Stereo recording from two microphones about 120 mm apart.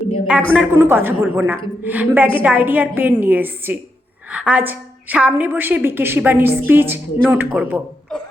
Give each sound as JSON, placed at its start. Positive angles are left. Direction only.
{"t": 0.5, "sound": "a woman's voice", "side_deg": -15}